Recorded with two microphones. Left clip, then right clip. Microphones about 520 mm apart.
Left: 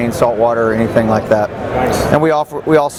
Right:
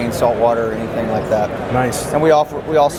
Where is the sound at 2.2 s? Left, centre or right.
Left.